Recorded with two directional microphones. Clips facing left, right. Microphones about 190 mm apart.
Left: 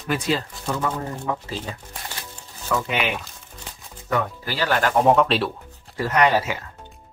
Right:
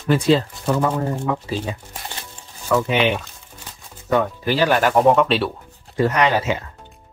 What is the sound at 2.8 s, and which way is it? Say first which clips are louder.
Speech: right 6 dB; 25° right (ahead or behind).